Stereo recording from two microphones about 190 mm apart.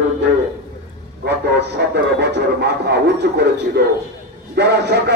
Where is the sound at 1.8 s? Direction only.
60° right (ahead or behind).